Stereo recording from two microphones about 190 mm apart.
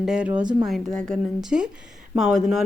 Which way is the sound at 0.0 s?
5° right (ahead or behind).